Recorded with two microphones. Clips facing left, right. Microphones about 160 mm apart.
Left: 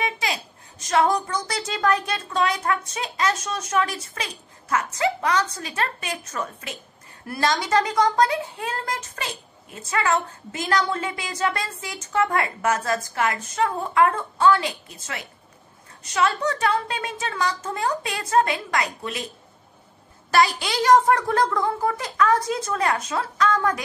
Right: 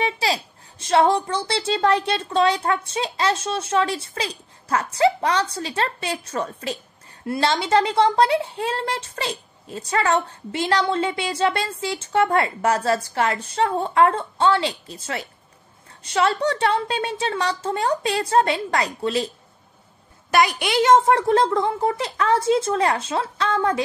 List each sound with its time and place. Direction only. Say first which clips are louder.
0.0 s a woman's voice: right 4 dB; 30° right (ahead or behind)
20.2 s a woman's voice: right 1 dB; 20° right (ahead or behind)